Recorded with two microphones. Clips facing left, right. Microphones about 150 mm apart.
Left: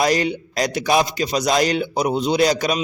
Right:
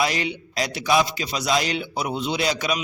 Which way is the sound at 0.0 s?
40° left (ahead or behind).